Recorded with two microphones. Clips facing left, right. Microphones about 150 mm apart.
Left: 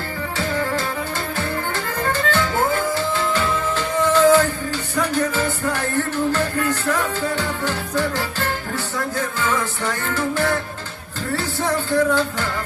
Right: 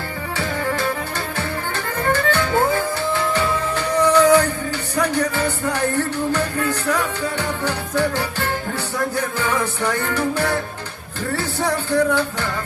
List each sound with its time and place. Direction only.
2.3 s music: 20° right (ahead or behind)
11.6 s music: 20° right (ahead or behind)